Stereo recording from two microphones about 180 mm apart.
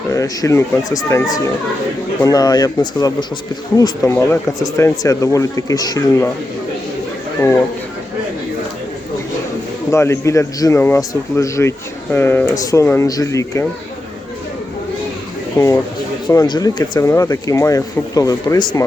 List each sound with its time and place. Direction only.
0.1 s speech: 15° left (ahead or behind)
9.9 s speech: 15° left (ahead or behind)
15.5 s speech: 15° left (ahead or behind)